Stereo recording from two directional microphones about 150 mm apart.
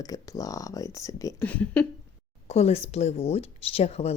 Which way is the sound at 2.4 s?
45° left (ahead or behind).